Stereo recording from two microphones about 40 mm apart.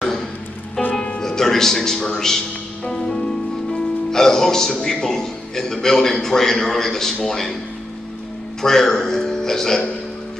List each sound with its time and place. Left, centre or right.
1.2 s speech: centre
2.0 s music: centre
4.1 s a man's voice: centre
8.6 s a man's voice: centre